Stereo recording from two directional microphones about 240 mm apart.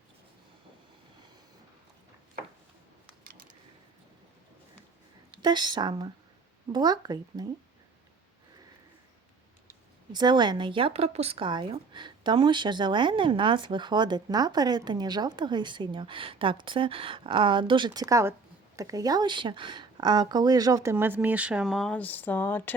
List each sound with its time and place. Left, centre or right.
5.4 s speech: centre
10.1 s speech: centre